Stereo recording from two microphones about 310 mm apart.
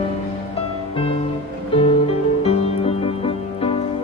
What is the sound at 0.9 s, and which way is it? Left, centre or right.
Music, centre.